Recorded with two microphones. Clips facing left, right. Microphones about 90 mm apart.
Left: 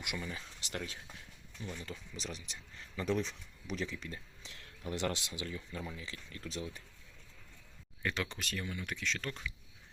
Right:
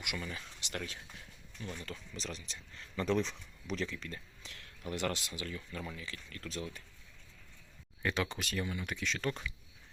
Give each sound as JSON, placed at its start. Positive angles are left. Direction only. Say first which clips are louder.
{"t": 0.2, "sound": "speech", "louder": "even", "side_deg": 20}
{"t": 8.0, "sound": "speech", "louder": "right 3 dB", "side_deg": -5}